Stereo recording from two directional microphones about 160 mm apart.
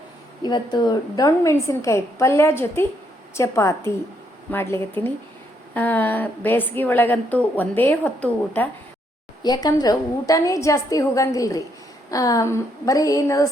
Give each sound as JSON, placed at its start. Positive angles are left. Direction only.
{"t": 0.4, "sound": "a woman's voice", "side_deg": 25}
{"t": 9.4, "sound": "a woman's voice", "side_deg": 25}